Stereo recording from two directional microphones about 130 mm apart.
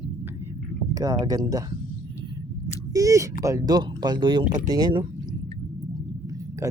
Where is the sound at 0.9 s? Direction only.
25° right (ahead or behind).